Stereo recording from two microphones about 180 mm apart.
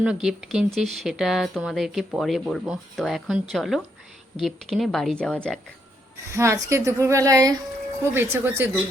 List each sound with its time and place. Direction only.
0.0 s speech: 5° right (ahead or behind)
6.3 s speech: 15° right (ahead or behind)